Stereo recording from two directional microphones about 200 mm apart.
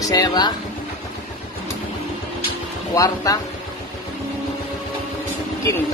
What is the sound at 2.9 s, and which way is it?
Speech, 15° left (ahead or behind).